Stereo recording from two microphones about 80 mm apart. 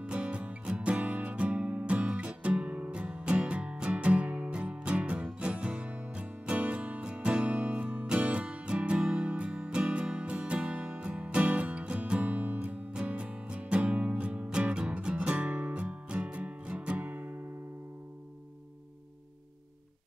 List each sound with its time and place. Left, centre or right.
0.0 s music: centre